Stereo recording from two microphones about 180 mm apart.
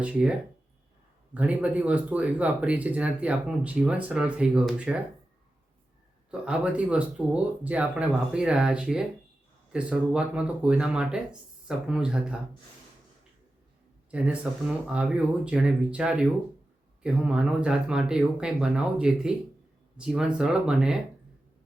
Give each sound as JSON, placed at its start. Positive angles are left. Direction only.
{"t": 0.0, "sound": "speech", "side_deg": -5}
{"t": 6.3, "sound": "speech", "side_deg": -5}
{"t": 14.1, "sound": "speech", "side_deg": -5}